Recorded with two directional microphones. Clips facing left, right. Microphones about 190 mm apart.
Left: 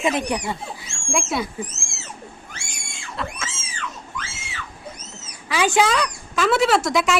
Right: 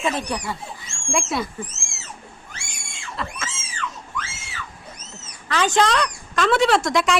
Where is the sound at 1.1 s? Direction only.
Centre (ahead or behind).